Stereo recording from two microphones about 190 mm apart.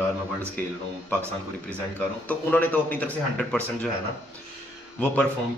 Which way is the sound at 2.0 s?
10° left (ahead or behind).